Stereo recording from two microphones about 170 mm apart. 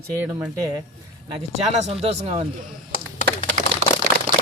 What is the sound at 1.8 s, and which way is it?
Speech, 35° right (ahead or behind).